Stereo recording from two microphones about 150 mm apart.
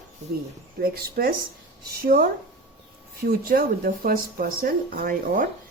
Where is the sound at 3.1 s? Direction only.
75° right (ahead or behind).